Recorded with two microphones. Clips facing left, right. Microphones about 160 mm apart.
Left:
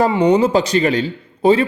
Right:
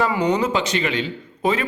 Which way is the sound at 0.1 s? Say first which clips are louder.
Left 6 dB; 30° left (ahead or behind).